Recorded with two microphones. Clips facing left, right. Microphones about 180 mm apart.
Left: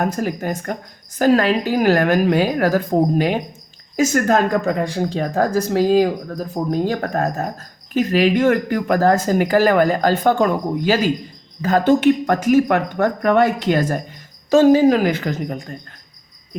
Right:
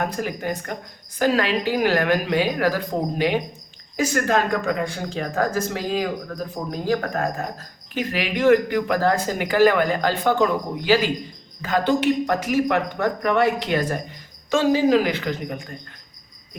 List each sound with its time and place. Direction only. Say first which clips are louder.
0.1 s speech: left 4 dB; 45° left (ahead or behind)